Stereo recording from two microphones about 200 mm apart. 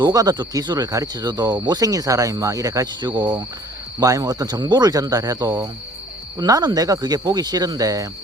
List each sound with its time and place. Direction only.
0.0 s speech: 20° right (ahead or behind)